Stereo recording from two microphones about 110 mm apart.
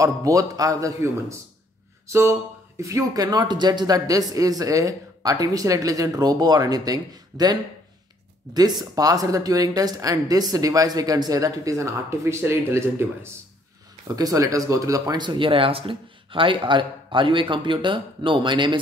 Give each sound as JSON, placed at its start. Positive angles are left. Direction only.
{"t": 0.0, "sound": "speech", "side_deg": -30}
{"t": 8.5, "sound": "speech", "side_deg": -35}
{"t": 14.0, "sound": "speech", "side_deg": -35}